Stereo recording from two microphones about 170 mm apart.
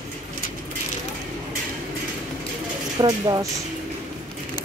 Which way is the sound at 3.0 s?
25° right (ahead or behind).